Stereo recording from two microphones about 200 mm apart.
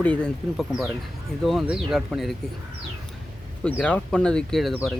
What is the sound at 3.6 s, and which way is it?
Speech, 5° left (ahead or behind).